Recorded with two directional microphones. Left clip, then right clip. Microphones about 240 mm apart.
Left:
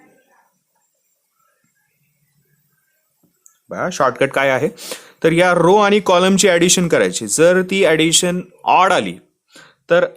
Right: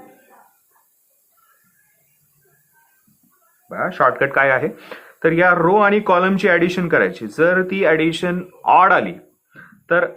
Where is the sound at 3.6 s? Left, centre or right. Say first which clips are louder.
Even; left.